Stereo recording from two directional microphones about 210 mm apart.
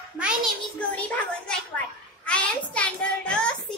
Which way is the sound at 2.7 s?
5° left (ahead or behind).